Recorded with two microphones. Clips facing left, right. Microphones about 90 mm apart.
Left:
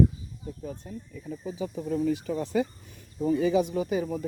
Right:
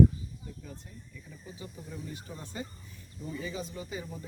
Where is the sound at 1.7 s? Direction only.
70° left (ahead or behind); by 2.6 s 90° left.